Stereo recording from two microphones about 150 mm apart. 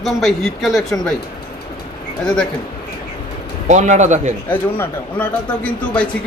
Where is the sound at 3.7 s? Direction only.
55° right (ahead or behind).